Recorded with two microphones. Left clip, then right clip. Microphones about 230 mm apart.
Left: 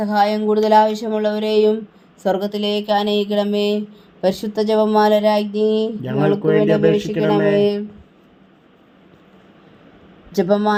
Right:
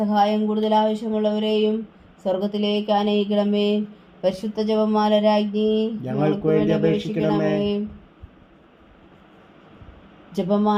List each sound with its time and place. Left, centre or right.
0.0 s speech: left
6.0 s speech: left
6.2 s speech: left
10.3 s speech: left